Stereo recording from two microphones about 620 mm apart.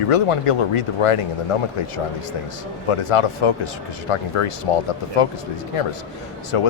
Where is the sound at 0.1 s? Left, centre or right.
Left.